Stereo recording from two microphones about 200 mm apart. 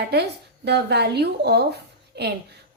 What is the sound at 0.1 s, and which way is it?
A woman's voice, 55° right (ahead or behind).